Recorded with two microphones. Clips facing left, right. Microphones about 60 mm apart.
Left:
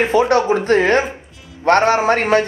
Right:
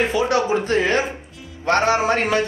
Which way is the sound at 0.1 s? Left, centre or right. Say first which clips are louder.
Left 5 dB; left.